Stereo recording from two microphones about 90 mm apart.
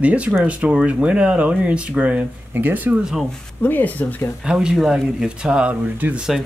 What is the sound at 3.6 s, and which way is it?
Speech, 20° left (ahead or behind).